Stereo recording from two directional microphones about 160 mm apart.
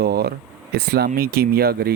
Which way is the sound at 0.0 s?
80° right.